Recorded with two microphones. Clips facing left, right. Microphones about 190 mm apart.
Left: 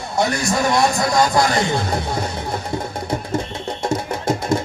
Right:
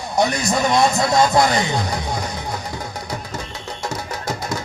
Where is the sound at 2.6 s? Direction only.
25° left (ahead or behind).